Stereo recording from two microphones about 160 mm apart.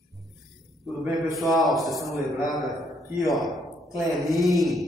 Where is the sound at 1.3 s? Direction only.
Centre (ahead or behind).